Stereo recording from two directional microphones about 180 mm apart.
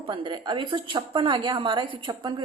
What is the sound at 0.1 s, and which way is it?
A woman's voice, 25° right (ahead or behind).